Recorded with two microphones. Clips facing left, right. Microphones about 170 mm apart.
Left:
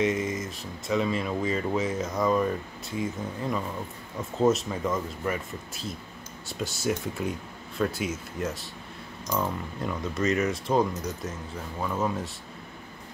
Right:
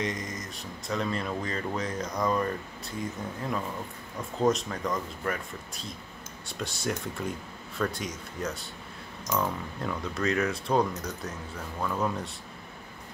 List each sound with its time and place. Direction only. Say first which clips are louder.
0.0 s speech: left 7 dB; 5° left (ahead or behind)